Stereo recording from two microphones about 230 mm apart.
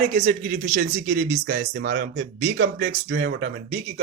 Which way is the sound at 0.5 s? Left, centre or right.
Right.